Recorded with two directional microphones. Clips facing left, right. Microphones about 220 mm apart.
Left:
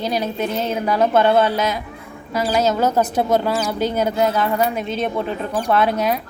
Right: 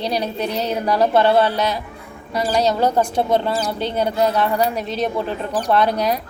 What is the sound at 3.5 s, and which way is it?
Speech, 30° right (ahead or behind).